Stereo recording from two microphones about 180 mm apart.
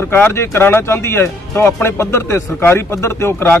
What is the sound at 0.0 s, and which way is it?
Speech, 15° left (ahead or behind).